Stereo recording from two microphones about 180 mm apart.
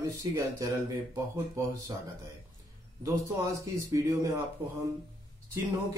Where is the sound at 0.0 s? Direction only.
20° right (ahead or behind).